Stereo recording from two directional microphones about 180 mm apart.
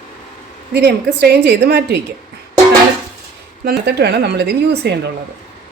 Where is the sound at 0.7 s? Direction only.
65° right (ahead or behind).